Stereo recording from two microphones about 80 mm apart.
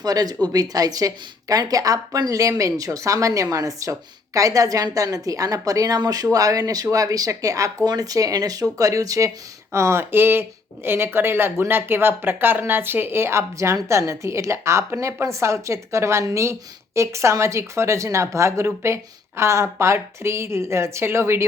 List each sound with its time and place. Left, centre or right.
0.0 s a woman's voice: right
9.7 s a woman's voice: right